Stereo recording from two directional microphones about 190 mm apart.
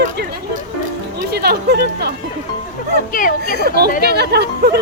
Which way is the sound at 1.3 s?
60° right (ahead or behind).